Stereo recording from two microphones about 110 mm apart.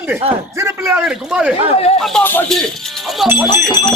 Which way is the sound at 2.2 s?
15° left (ahead or behind).